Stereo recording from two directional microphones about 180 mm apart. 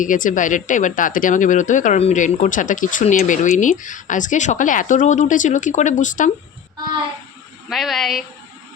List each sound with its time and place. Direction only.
0.0 s speech: 45° left (ahead or behind)
7.7 s speech: centre (ahead or behind)